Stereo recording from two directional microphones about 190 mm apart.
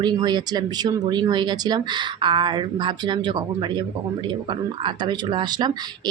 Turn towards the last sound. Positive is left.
turn(degrees=-20)  # may be behind; listen again after turning